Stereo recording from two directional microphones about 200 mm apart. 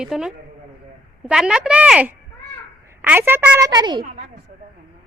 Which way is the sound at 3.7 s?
20° right (ahead or behind).